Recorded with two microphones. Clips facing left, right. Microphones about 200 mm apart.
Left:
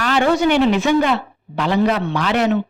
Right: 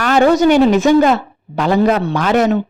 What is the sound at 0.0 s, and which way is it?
A woman's voice, 45° right (ahead or behind).